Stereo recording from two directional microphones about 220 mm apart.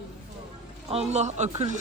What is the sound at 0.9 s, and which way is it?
Speech, 30° right (ahead or behind).